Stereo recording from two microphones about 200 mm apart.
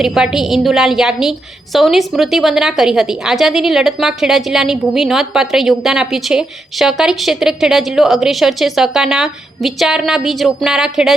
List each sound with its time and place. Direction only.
0.0 s a woman's voice: centre (ahead or behind)